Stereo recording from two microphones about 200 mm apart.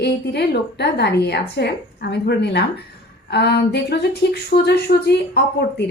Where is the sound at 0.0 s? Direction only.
55° left (ahead or behind).